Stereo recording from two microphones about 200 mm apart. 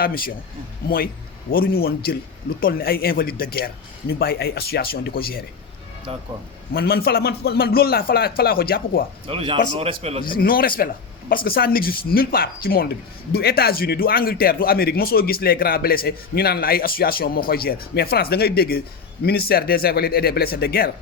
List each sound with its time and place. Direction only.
0.0 s speech: 45° left (ahead or behind)
6.1 s a man's voice: 30° right (ahead or behind)
6.7 s speech: 50° left (ahead or behind)
9.2 s a man's voice: 25° right (ahead or behind)
10.2 s speech: 45° left (ahead or behind)